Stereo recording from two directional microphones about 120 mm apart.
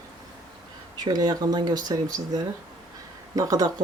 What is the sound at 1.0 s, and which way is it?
Speech, 35° right (ahead or behind).